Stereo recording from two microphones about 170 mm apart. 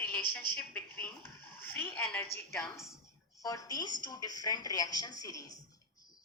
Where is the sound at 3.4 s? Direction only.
20° left (ahead or behind).